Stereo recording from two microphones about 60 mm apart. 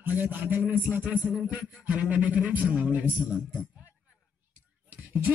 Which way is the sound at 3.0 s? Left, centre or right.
Right.